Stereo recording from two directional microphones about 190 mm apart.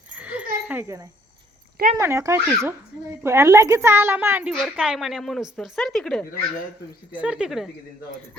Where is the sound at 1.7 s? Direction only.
45° right (ahead or behind).